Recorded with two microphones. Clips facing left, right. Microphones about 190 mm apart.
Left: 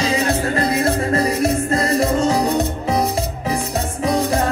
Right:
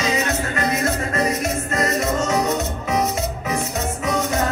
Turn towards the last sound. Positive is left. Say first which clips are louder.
# left 3 dB
turn(degrees=35)  # may be behind; listen again after turning